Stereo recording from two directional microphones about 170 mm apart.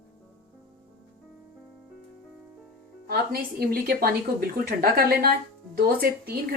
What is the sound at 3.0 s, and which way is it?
Speech, 65° right (ahead or behind).